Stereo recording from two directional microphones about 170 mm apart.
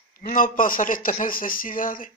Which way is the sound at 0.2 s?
50° left (ahead or behind).